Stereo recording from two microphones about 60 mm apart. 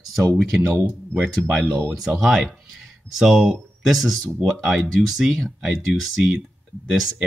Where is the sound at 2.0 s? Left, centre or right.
Centre.